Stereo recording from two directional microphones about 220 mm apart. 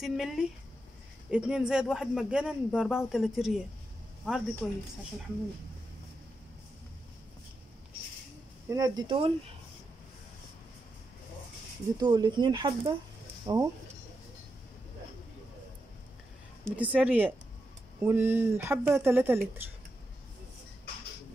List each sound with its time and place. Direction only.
0.0 s speech: centre (ahead or behind)
8.6 s speech: 15° right (ahead or behind)
12.0 s speech: 20° right (ahead or behind)
16.7 s speech: 5° right (ahead or behind)